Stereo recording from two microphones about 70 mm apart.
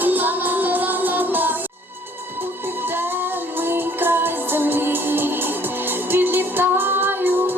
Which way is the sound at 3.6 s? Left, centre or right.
Right.